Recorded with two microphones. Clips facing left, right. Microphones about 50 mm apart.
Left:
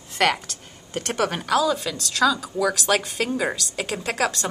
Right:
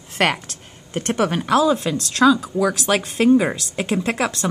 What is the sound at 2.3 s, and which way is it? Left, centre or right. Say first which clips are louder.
Speech: right 5 dB; centre.